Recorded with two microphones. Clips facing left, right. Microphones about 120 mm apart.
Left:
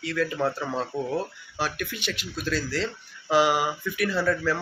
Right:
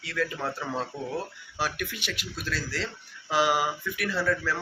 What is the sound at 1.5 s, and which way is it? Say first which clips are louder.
Speech: left 1 dB; 10° right (ahead or behind).